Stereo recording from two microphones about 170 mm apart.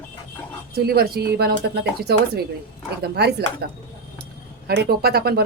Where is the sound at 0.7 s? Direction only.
70° right (ahead or behind).